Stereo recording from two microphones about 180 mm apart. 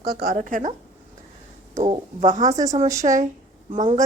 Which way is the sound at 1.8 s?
40° right (ahead or behind).